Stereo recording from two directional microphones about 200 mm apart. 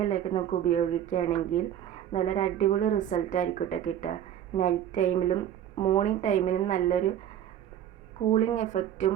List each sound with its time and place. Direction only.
0.0 s a woman's voice: 30° left (ahead or behind)
8.3 s a woman's voice: 35° left (ahead or behind)